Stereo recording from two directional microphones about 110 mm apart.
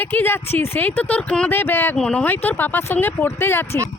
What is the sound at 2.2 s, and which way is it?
Speech, 20° left (ahead or behind).